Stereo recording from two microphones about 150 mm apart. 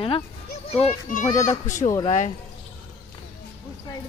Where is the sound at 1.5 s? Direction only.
55° left (ahead or behind).